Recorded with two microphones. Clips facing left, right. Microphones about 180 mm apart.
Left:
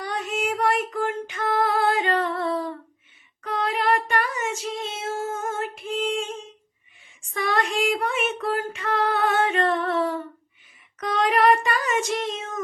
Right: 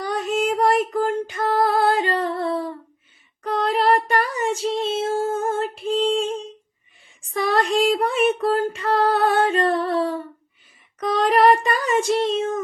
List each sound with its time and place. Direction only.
0.0 s female singing: 35° right (ahead or behind)
3.4 s a sound: 35° right (ahead or behind)
7.2 s female singing: 35° right (ahead or behind)
11.0 s child singing: 35° right (ahead or behind)